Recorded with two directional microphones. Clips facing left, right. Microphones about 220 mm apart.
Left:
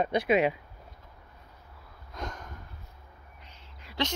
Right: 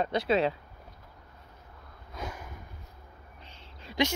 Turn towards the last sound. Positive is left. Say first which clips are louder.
# right 4 dB
turn(degrees=-30)  # may be behind; listen again after turning